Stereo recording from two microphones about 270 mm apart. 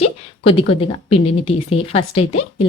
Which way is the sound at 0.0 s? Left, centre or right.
Left.